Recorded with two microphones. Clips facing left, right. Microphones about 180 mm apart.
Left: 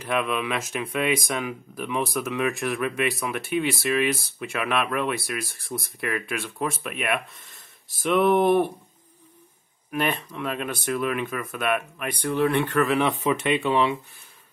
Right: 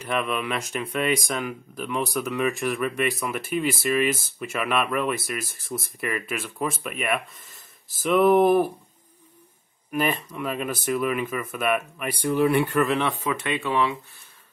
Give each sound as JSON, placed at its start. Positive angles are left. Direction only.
{"t": 0.0, "sound": "speech", "side_deg": 0}
{"t": 9.8, "sound": "speech", "side_deg": 0}
{"t": 12.9, "sound": "speech", "side_deg": 20}